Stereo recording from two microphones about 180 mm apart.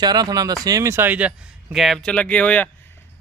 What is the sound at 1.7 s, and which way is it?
Speech, centre (ahead or behind).